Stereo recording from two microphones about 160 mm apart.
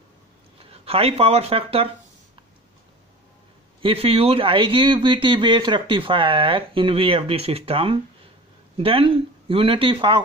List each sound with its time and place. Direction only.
0.6 s speech: 35° right (ahead or behind)
3.8 s speech: 35° right (ahead or behind)